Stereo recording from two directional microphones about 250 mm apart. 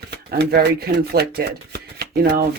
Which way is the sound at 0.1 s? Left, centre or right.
Right.